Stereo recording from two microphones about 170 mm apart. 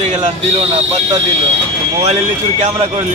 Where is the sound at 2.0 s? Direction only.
40° right (ahead or behind).